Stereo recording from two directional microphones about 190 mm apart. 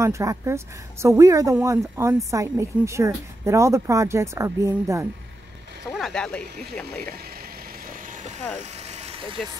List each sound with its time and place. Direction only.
0.0 s a woman's voice: 15° right (ahead or behind)
5.9 s speech: centre (ahead or behind)
7.8 s vehicle: 45° right (ahead or behind); by 9.4 s 30° right (ahead or behind)